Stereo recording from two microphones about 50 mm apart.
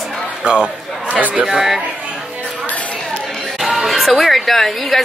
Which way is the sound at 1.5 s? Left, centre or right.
Centre.